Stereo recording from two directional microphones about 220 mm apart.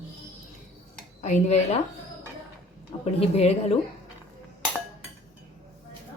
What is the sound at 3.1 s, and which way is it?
Speech, 30° left (ahead or behind).